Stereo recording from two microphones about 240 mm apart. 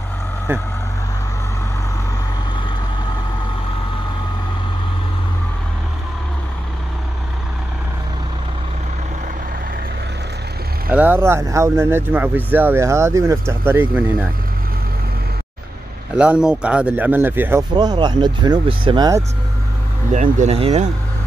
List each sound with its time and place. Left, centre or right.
0.5 s speech: centre
10.9 s speech: centre
16.2 s speech: centre
20.1 s speech: right